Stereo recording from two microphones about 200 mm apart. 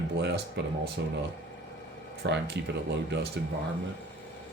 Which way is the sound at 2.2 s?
60° right (ahead or behind).